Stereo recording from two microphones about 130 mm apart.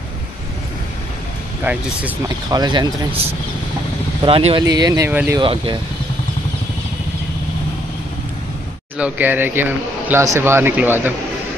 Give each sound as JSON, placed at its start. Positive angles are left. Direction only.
{"t": 1.6, "sound": "speech", "side_deg": -10}
{"t": 2.2, "sound": "speech", "side_deg": -30}
{"t": 4.2, "sound": "speech", "side_deg": -45}
{"t": 4.6, "sound": "speech", "side_deg": -30}
{"t": 5.4, "sound": "speech", "side_deg": -40}
{"t": 8.9, "sound": "speech", "side_deg": -10}